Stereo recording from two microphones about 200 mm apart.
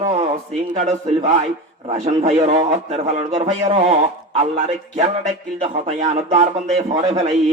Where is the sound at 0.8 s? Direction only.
35° right (ahead or behind).